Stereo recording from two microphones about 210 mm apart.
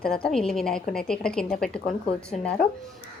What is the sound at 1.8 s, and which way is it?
Speech, 30° left (ahead or behind).